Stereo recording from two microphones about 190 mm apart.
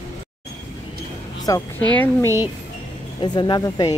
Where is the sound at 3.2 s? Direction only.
25° left (ahead or behind).